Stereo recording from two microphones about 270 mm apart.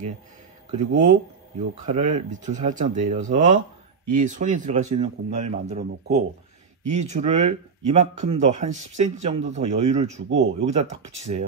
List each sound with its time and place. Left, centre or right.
0.7 s speech: right